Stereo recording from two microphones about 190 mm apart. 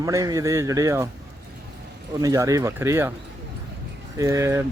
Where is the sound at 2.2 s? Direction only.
15° right (ahead or behind).